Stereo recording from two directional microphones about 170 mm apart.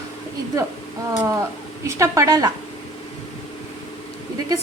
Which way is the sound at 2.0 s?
20° right (ahead or behind).